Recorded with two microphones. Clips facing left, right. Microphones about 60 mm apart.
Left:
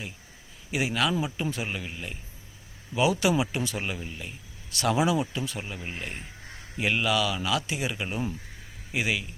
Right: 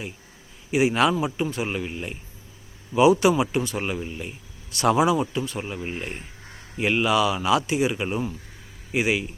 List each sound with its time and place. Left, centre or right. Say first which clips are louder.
0.7 s a man's voice: right 7 dB; centre
3.8 s a man's voice: right 5 dB; centre